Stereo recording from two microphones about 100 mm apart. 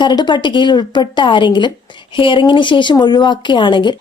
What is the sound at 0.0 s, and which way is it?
Speech, 50° left (ahead or behind).